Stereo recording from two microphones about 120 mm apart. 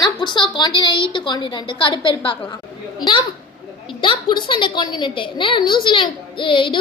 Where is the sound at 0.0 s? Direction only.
40° left (ahead or behind).